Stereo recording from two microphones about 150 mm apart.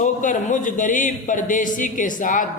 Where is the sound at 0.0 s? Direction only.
60° left (ahead or behind).